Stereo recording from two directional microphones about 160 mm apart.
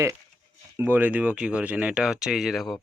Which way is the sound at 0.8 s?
10° right (ahead or behind).